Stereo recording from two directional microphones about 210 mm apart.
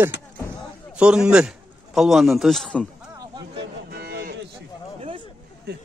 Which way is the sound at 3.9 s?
50° right (ahead or behind).